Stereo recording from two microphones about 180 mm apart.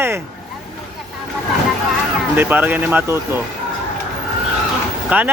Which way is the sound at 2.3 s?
10° right (ahead or behind).